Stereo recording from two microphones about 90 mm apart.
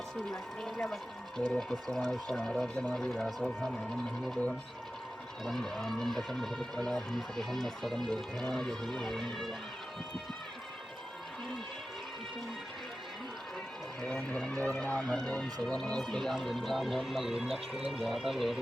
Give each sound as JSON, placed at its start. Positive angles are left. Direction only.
{"t": 0.2, "sound": "speech", "side_deg": 5}
{"t": 5.5, "sound": "speech", "side_deg": 5}
{"t": 14.0, "sound": "speech", "side_deg": 10}